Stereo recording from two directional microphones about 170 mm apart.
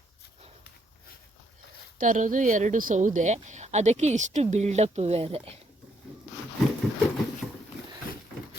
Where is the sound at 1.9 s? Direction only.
50° right (ahead or behind).